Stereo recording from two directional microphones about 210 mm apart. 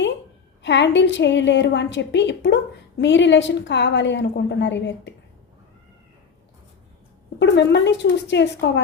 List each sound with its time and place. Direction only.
0.6 s a woman's voice: 55° left (ahead or behind)
7.3 s a woman's voice: 55° left (ahead or behind)